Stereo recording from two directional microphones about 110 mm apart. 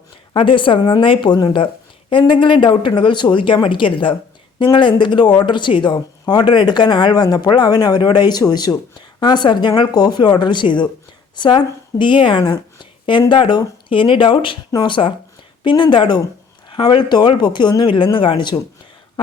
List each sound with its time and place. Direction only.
0.3 s speech: 50° left (ahead or behind)